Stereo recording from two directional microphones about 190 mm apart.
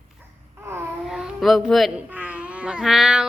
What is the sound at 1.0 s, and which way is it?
Speech, 5° right (ahead or behind).